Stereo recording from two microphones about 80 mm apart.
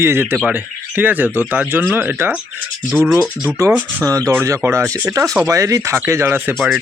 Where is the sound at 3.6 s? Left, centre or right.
Right.